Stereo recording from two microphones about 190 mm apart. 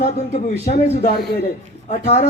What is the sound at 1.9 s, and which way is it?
Speech, 40° left (ahead or behind).